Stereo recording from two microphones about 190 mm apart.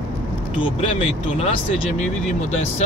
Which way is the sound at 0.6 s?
30° left (ahead or behind).